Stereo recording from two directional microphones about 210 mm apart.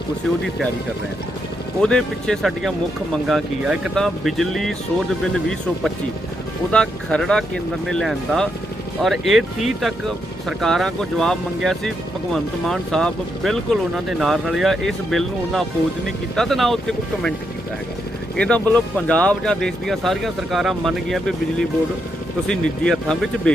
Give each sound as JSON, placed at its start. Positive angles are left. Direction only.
{"t": 1.8, "sound": "speech", "side_deg": 5}
{"t": 18.3, "sound": "speech", "side_deg": 5}